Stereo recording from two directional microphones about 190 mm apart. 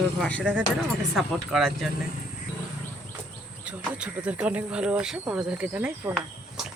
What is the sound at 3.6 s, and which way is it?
Speech, 5° right (ahead or behind).